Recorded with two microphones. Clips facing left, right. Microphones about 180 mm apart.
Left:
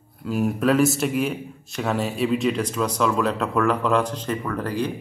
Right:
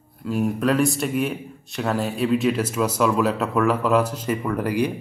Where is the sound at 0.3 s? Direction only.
Centre (ahead or behind).